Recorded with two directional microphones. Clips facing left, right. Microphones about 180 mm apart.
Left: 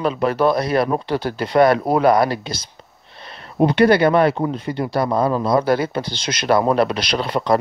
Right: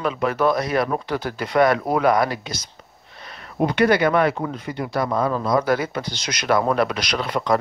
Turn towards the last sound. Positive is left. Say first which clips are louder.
# left 3 dB
turn(degrees=30)  # may be behind; listen again after turning